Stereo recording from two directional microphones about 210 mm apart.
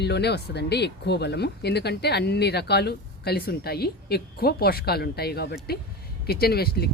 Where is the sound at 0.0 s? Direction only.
50° left (ahead or behind).